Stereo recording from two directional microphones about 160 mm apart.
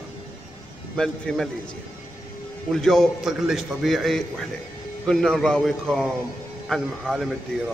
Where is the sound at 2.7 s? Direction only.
5° left (ahead or behind).